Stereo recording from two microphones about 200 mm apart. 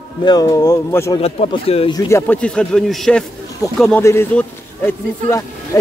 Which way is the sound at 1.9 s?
15° left (ahead or behind).